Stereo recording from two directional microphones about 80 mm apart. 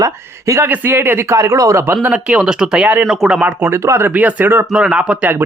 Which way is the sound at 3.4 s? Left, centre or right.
Right.